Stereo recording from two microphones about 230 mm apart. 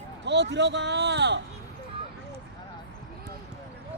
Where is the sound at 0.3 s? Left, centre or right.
Right.